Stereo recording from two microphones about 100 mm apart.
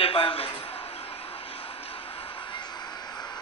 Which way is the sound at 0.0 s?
65° left (ahead or behind).